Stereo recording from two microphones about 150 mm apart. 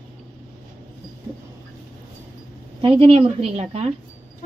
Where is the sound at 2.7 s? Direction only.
35° right (ahead or behind).